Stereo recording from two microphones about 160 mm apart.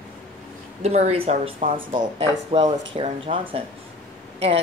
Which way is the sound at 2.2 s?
40° right (ahead or behind).